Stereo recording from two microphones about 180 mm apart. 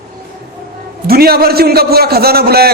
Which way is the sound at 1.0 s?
60° right (ahead or behind).